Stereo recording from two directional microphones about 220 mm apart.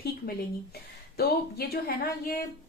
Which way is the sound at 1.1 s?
45° left (ahead or behind).